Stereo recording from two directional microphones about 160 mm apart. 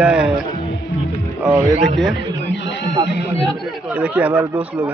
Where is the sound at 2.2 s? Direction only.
90° left.